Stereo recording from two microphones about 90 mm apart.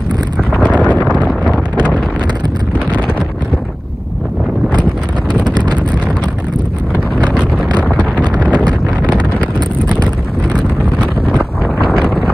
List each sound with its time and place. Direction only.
0.8 s a sound: 15° left (ahead or behind)
5.3 s wind noise: 55° right (ahead or behind)
10.5 s wind noise: 10° right (ahead or behind)
11.9 s wind noise: centre (ahead or behind)